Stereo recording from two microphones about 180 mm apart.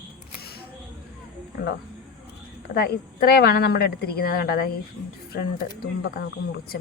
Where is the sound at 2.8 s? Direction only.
60° left (ahead or behind).